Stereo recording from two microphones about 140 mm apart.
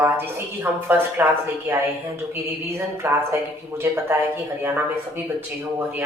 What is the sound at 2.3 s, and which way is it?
A woman's voice, 20° right (ahead or behind).